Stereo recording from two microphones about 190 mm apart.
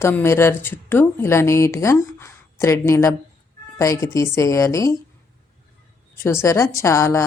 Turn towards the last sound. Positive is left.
turn(degrees=15)  # may be behind; listen again after turning